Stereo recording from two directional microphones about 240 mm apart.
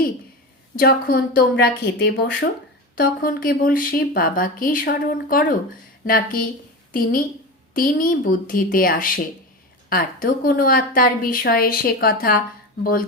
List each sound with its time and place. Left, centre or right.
0.8 s speech: left